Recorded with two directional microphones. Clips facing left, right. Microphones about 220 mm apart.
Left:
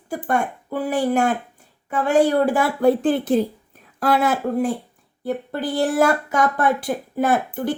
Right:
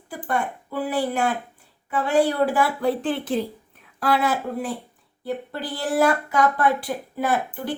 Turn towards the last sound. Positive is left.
turn(degrees=45)  # may be behind; listen again after turning